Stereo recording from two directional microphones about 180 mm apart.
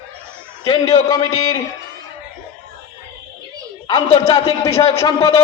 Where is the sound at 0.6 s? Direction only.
30° left (ahead or behind).